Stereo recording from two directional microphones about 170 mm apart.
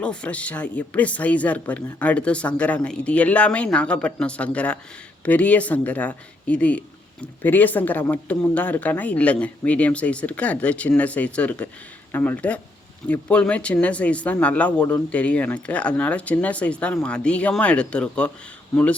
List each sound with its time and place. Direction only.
0.0 s speech: 5° left (ahead or behind)